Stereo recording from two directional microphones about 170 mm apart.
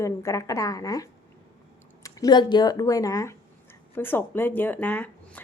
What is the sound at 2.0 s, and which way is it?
A woman's voice, 20° left (ahead or behind).